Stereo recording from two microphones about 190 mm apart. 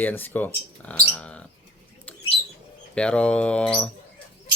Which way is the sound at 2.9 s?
5° left (ahead or behind).